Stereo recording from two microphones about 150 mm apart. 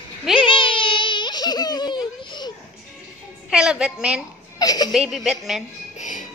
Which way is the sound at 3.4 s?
5° right (ahead or behind).